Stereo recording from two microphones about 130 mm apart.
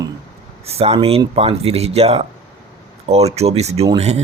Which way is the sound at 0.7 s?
50° right (ahead or behind).